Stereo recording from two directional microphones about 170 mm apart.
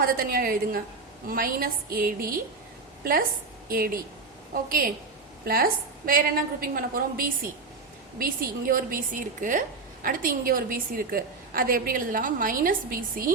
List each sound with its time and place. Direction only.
0.0 s a woman's voice: 60° right (ahead or behind)